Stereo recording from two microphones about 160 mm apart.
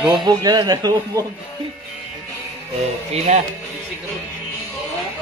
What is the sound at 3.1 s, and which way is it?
Speech, 45° right (ahead or behind).